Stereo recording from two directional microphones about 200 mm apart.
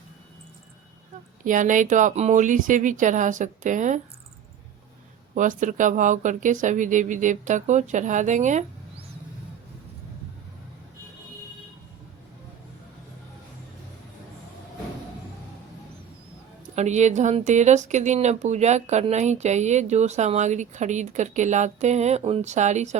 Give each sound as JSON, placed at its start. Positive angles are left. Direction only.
{"t": 1.5, "sound": "speech", "side_deg": -40}
{"t": 5.3, "sound": "speech", "side_deg": -40}
{"t": 16.7, "sound": "speech", "side_deg": -35}